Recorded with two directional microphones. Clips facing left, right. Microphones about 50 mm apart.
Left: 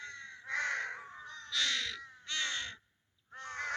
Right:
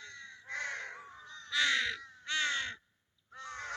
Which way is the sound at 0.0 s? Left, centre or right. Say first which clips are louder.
Left 3 dB; left.